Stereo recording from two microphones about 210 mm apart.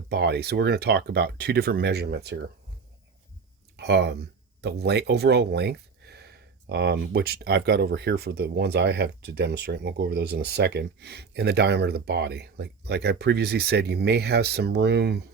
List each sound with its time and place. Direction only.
0.1 s speech: 50° right (ahead or behind)
3.8 s speech: 55° right (ahead or behind)